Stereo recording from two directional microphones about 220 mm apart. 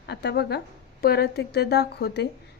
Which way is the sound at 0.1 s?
50° left (ahead or behind).